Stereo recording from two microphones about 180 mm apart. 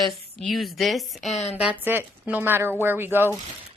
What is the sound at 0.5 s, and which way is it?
Speech, centre (ahead or behind).